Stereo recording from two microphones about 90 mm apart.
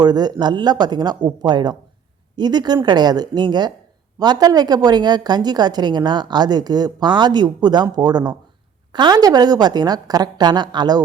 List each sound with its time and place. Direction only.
0.0 s a woman's voice: 50° right (ahead or behind)